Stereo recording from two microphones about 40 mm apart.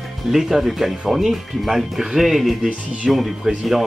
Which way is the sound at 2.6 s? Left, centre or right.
Right.